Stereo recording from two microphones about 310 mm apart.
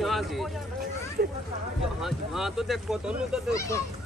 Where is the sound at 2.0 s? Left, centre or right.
Centre.